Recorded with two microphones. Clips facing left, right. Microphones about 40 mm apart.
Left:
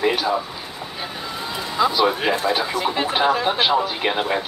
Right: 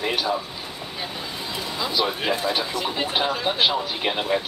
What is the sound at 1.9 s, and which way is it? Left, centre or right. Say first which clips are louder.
Speech: left 3 dB; centre.